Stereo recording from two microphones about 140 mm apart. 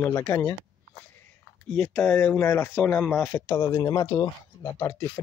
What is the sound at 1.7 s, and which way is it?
Speech, 10° left (ahead or behind).